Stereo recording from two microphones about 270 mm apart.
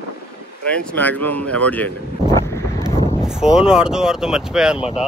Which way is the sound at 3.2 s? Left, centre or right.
Centre.